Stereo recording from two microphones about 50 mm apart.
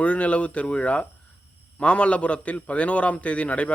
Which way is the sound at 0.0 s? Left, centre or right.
Left.